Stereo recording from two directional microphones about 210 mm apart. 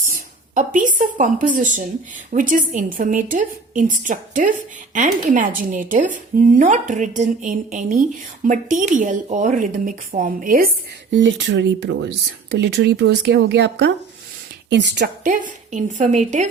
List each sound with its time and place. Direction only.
0.5 s a woman's voice: 40° right (ahead or behind)
11.1 s speech: 60° right (ahead or behind)
15.2 s a woman's voice: 40° right (ahead or behind)